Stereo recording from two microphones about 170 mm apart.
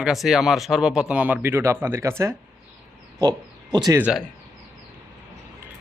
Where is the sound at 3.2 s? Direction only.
25° right (ahead or behind).